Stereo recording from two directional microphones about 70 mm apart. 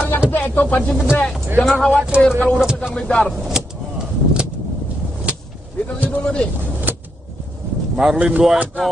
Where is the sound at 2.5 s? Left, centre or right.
Centre.